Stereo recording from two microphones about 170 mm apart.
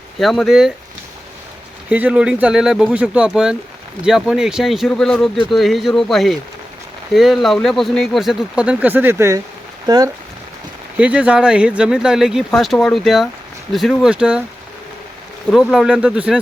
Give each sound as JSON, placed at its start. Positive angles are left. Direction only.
{"t": 0.2, "sound": "speech", "side_deg": 0}
{"t": 1.9, "sound": "speech", "side_deg": -10}
{"t": 10.9, "sound": "speech", "side_deg": -5}
{"t": 15.7, "sound": "speech", "side_deg": -5}